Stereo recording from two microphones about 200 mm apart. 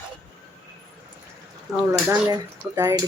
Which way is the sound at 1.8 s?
10° right (ahead or behind).